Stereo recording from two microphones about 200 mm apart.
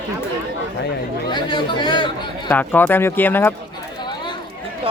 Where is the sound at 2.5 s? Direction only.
10° left (ahead or behind).